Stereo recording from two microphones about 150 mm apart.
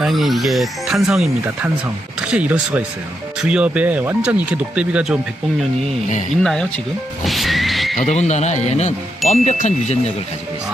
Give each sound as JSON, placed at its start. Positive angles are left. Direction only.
{"t": 0.0, "sound": "speech", "side_deg": 0}
{"t": 7.3, "sound": "music", "side_deg": 0}
{"t": 7.9, "sound": "speech", "side_deg": 55}